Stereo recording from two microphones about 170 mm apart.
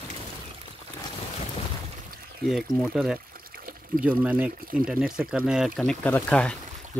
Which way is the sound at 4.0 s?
10° right (ahead or behind).